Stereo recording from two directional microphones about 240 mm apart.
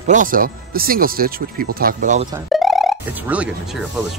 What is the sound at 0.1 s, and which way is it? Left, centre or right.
Speech, right.